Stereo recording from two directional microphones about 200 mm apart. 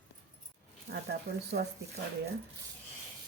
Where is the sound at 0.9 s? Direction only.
60° right (ahead or behind).